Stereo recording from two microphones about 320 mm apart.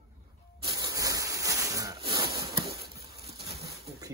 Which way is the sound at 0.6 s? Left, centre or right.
Centre.